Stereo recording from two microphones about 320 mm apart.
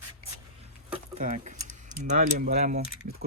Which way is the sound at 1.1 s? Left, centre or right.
Right.